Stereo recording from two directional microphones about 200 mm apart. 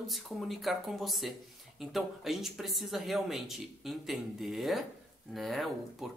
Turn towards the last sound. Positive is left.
turn(degrees=0)  # may be behind; listen again after turning